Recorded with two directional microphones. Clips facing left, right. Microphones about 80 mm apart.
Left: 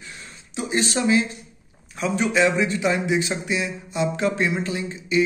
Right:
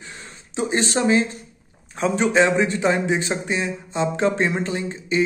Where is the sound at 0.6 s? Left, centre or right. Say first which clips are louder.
Right 2 dB; right.